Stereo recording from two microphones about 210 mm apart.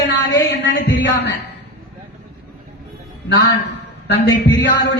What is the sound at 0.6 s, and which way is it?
Speech, 60° left (ahead or behind).